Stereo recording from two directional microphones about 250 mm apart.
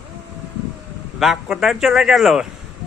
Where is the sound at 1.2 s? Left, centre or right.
Centre.